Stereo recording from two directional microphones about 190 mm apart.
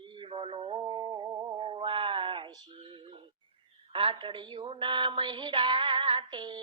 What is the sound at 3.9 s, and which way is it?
A woman's voice, 30° right (ahead or behind).